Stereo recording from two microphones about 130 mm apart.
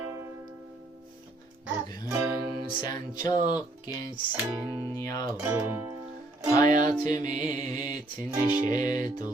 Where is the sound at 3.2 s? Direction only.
30° left (ahead or behind).